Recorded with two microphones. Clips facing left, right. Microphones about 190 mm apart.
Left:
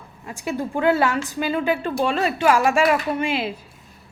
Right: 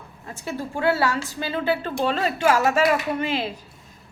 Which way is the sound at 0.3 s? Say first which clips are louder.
Left 4 dB; 15° left (ahead or behind).